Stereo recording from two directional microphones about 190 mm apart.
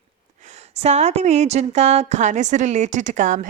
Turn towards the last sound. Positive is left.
turn(degrees=-40)  # may be behind; listen again after turning